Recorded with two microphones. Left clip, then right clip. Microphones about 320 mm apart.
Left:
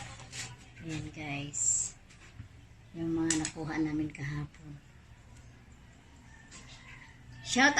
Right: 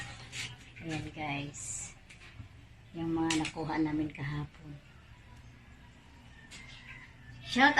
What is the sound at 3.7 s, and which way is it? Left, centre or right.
Speech, right.